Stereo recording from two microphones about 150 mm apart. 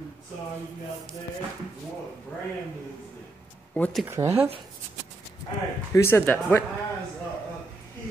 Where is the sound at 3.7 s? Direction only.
10° left (ahead or behind).